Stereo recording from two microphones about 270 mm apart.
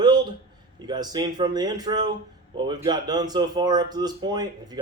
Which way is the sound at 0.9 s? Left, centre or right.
Centre.